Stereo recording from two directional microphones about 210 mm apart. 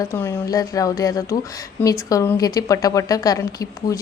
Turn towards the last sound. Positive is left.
turn(degrees=15)  # may be behind; listen again after turning